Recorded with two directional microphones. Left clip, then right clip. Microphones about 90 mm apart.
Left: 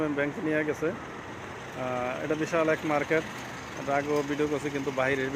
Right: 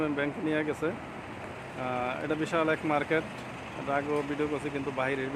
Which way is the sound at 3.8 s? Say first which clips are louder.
Left 3 dB; 20° left (ahead or behind).